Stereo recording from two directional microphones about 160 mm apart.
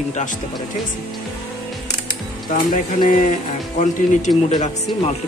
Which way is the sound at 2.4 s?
60° left (ahead or behind).